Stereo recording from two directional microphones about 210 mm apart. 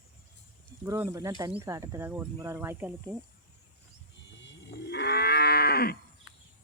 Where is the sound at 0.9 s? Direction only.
10° right (ahead or behind).